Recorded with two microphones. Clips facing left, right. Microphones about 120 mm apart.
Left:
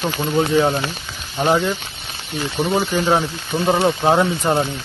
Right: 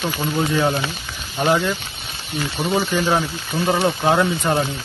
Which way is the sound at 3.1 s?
25° left (ahead or behind).